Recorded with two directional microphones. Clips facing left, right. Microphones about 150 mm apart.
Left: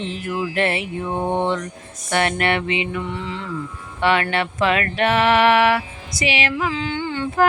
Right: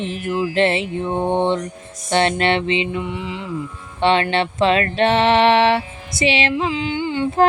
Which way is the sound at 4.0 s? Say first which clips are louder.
Right 3 dB; 25° right (ahead or behind).